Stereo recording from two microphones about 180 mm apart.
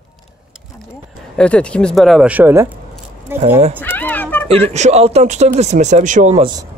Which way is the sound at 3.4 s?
35° right (ahead or behind).